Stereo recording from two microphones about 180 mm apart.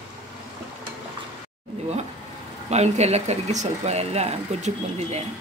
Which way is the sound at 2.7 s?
40° right (ahead or behind).